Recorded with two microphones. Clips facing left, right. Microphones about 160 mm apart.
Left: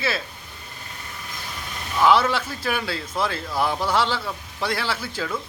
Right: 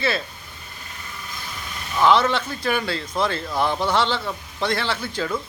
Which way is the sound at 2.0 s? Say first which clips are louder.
Right 1 dB; 5° left (ahead or behind).